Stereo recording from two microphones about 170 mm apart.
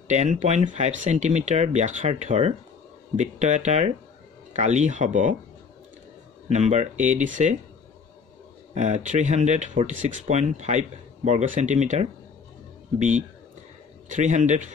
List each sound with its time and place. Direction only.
0.1 s speech: 40° right (ahead or behind)
6.5 s speech: 40° right (ahead or behind)
8.7 s speech: 45° right (ahead or behind)
14.0 s speech: 45° right (ahead or behind)